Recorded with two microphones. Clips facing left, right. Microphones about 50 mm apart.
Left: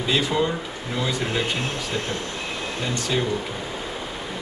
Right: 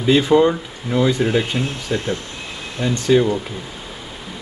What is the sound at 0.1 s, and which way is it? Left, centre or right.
Speech, right.